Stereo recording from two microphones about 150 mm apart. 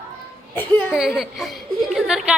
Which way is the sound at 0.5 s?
15° left (ahead or behind).